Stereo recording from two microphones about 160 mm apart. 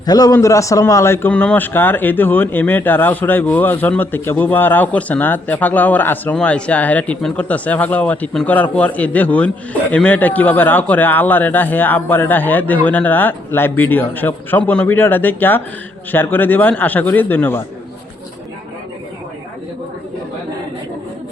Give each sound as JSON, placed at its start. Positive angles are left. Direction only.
{"t": 0.0, "sound": "a man's voice", "side_deg": 25}